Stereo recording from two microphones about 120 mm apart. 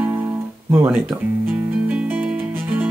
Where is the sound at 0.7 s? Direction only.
20° right (ahead or behind).